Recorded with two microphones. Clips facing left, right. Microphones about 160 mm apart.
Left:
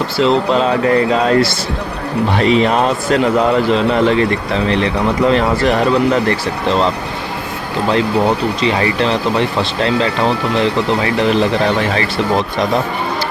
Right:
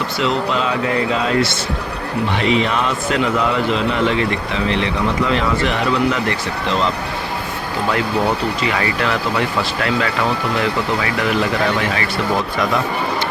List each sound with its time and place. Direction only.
0.2 s a man's voice: 35° left (ahead or behind)
8.6 s speech: 25° left (ahead or behind)